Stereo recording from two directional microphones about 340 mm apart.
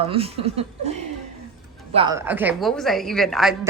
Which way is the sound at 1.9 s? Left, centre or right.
Centre.